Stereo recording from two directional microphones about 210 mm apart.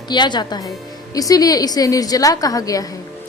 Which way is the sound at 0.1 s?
20° left (ahead or behind).